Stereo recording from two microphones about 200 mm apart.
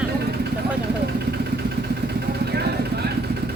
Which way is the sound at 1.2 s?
55° right (ahead or behind).